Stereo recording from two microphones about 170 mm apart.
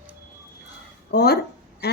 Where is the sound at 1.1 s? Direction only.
75° left (ahead or behind).